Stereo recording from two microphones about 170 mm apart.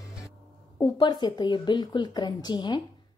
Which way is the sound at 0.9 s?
25° left (ahead or behind).